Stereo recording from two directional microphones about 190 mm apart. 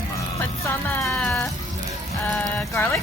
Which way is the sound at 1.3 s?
Centre (ahead or behind).